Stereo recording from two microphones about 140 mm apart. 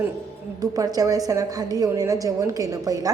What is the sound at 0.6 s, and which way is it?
A woman's voice, 25° right (ahead or behind).